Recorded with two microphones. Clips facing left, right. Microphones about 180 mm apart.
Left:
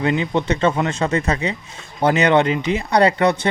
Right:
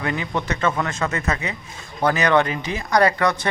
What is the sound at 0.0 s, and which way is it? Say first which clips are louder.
Speech: left 6 dB; 25° left (ahead or behind).